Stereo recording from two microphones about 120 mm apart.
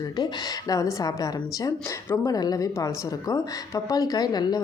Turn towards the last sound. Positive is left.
turn(degrees=35)  # may be behind; listen again after turning